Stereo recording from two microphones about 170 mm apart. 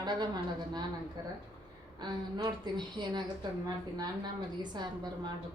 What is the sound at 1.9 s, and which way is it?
A woman's voice, 25° right (ahead or behind).